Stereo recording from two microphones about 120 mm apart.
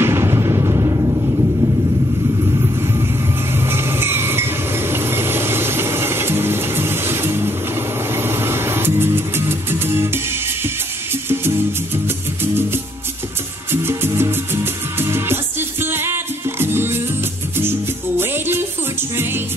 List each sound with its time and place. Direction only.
0.0 s music: 20° right (ahead or behind)
3.6 s vehicle: 20° right (ahead or behind)
8.1 s music: 20° right (ahead or behind)
13.7 s music: 20° right (ahead or behind)